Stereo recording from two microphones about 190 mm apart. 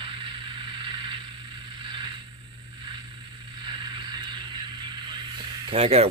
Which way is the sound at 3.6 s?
25° right (ahead or behind).